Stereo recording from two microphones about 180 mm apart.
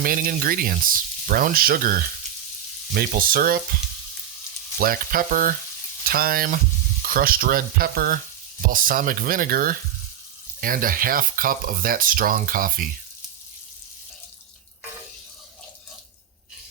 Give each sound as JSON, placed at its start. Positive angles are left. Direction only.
{"t": 0.0, "sound": "speech", "side_deg": -50}
{"t": 4.8, "sound": "speech", "side_deg": -55}